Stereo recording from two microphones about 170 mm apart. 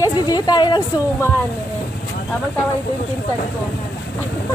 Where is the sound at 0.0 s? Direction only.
25° left (ahead or behind).